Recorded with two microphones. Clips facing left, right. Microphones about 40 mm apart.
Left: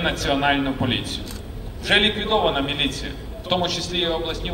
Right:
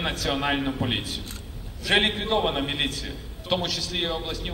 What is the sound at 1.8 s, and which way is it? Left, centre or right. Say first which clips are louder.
A man's voice: left 3 dB; left.